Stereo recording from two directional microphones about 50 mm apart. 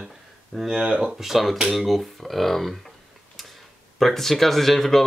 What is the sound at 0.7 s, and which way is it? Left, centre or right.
Speech, centre.